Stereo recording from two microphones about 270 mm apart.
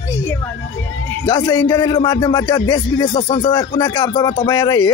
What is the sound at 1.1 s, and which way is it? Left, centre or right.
Speech, centre.